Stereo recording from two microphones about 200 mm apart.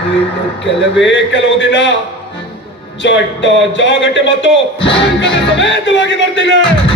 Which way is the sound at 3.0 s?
65° left (ahead or behind).